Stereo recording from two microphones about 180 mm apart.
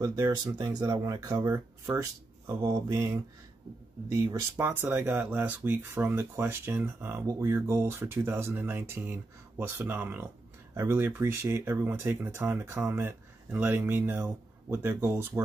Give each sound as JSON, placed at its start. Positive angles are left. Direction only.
{"t": 0.0, "sound": "speech", "side_deg": -20}